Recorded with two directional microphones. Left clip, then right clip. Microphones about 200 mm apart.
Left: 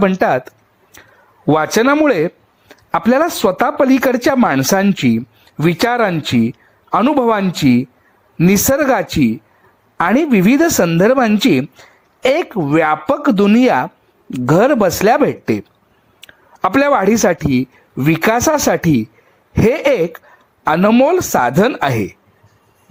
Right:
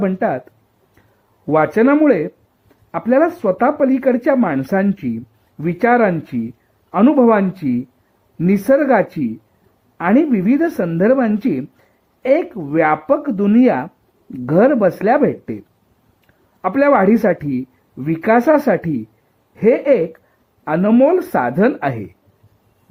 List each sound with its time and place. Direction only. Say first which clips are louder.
0.0 s speech: left 5 dB; 25° left (ahead or behind)